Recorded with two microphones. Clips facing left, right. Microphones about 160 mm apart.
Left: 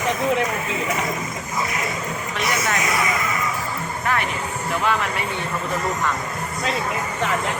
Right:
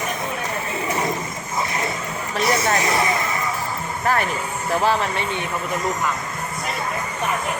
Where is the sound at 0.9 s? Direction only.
30° right (ahead or behind).